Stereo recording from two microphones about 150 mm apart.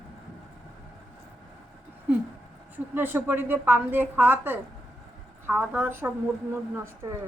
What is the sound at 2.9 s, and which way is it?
A woman's voice, 15° right (ahead or behind).